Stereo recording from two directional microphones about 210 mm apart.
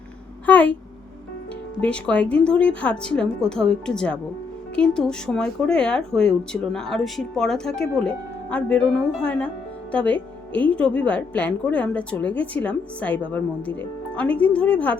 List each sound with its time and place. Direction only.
0.4 s a woman's voice: 5° left (ahead or behind)
1.8 s a woman's voice: 5° left (ahead or behind)